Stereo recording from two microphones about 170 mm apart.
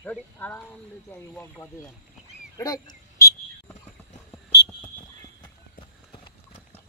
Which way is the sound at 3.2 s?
15° left (ahead or behind).